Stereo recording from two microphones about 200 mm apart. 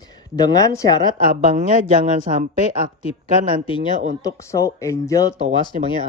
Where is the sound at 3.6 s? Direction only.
25° left (ahead or behind).